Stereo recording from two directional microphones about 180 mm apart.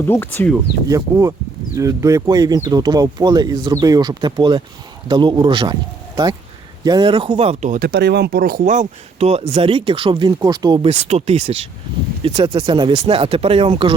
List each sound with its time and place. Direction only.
0.1 s speech: 10° left (ahead or behind)
0.9 s speech: 15° right (ahead or behind)
6.8 s speech: 25° right (ahead or behind)
7.8 s speech: 65° right (ahead or behind); by 10.8 s 20° right (ahead or behind)
10.8 s speech: 35° right (ahead or behind)